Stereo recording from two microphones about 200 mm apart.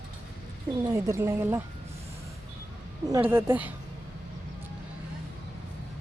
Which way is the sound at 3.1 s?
10° right (ahead or behind).